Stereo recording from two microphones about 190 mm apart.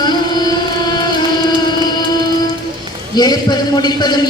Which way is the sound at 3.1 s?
20° left (ahead or behind).